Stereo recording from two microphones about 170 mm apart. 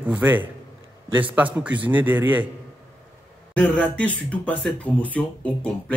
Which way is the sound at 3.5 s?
5° left (ahead or behind).